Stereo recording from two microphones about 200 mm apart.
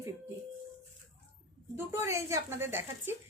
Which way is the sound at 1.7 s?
15° right (ahead or behind).